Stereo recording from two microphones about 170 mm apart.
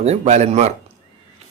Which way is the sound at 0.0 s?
40° right (ahead or behind).